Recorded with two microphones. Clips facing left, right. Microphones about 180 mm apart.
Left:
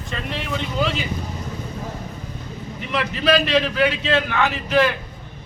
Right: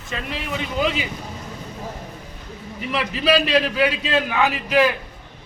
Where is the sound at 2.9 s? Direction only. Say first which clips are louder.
Even; 5° right (ahead or behind).